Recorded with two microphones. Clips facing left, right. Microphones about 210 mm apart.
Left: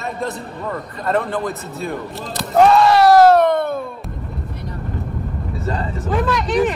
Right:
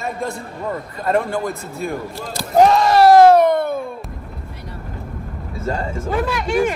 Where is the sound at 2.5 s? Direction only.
40° right (ahead or behind).